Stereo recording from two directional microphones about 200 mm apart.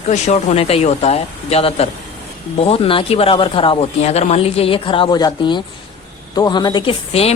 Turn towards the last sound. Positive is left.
turn(degrees=30)  # may be behind; listen again after turning